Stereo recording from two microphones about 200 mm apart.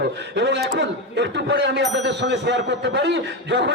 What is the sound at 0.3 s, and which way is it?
A man's voice, 60° right (ahead or behind).